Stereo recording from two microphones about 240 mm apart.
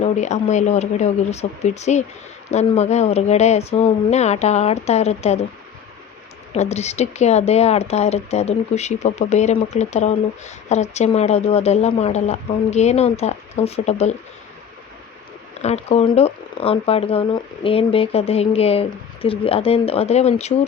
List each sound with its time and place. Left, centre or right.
0.0 s speech: left
6.5 s speech: left
15.6 s speech: left